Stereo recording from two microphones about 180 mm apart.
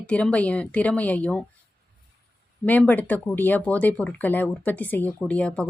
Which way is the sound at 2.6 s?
10° left (ahead or behind).